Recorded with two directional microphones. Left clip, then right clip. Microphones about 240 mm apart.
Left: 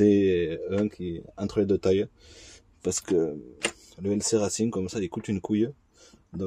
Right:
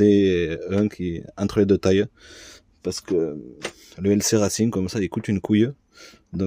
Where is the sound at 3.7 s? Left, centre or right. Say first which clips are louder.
Right 8 dB; right.